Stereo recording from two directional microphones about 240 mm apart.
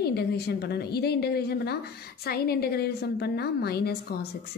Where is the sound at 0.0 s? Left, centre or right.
Left.